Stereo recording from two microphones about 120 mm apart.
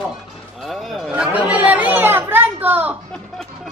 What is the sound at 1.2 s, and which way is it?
Chatter, 10° right (ahead or behind).